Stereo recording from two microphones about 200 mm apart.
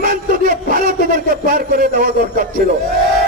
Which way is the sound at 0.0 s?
45° right (ahead or behind).